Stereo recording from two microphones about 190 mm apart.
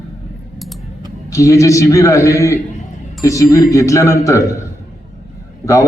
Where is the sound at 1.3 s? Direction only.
15° left (ahead or behind).